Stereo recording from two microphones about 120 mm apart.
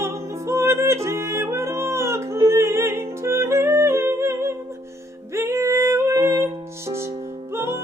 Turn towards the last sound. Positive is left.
turn(degrees=-20)  # may be behind; listen again after turning